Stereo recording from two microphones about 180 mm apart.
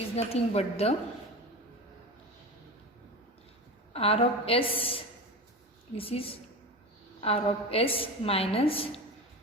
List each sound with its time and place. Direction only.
0.2 s a woman's voice: 35° left (ahead or behind)
3.9 s a woman's voice: 35° left (ahead or behind)